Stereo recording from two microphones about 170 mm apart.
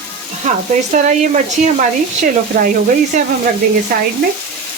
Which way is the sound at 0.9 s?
45° right (ahead or behind).